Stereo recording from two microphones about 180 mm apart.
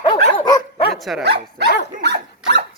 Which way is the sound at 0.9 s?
Centre (ahead or behind).